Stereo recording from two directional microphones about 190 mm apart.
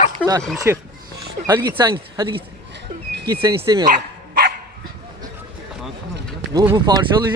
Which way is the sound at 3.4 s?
20° right (ahead or behind).